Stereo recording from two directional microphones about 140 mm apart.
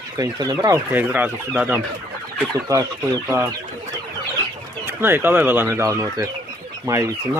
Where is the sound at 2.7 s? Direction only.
25° right (ahead or behind).